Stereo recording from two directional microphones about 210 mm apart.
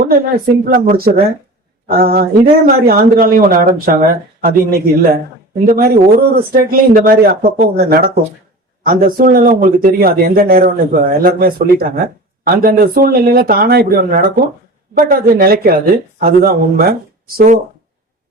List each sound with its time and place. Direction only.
0.1 s a man's voice: 45° right (ahead or behind)